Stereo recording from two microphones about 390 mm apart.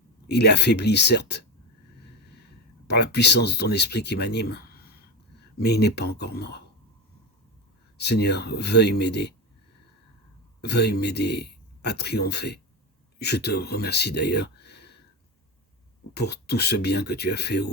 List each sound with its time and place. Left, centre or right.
0.3 s speech: left
2.8 s speech: left
7.9 s speech: left
10.6 s speech: left
16.1 s speech: left